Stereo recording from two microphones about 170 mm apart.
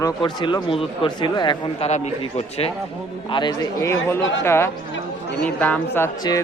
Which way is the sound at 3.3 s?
25° left (ahead or behind).